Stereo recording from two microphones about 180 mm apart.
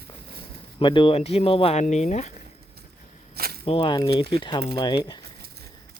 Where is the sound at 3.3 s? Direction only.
60° right (ahead or behind).